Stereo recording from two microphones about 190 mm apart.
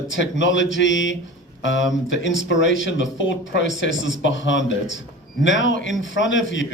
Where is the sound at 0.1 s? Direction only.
80° left.